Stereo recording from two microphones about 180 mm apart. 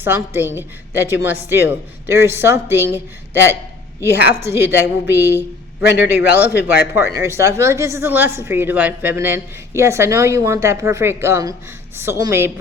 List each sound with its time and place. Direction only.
0.0 s a woman's voice: 10° right (ahead or behind)